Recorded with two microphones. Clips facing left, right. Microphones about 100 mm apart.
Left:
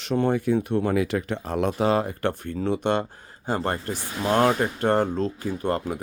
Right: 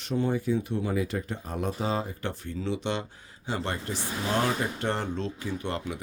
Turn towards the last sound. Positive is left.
turn(degrees=45)  # may be behind; listen again after turning